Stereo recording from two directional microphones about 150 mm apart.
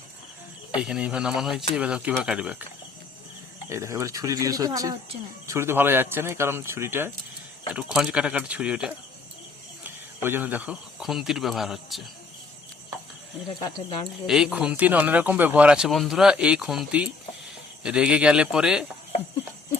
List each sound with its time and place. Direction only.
0.8 s speech: 5° right (ahead or behind)
3.7 s speech: 20° right (ahead or behind)
10.2 s speech: 15° right (ahead or behind)
13.5 s speech: 30° left (ahead or behind)
14.3 s speech: 5° right (ahead or behind)